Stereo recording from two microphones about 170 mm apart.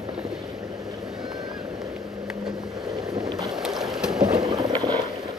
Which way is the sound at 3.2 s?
25° right (ahead or behind).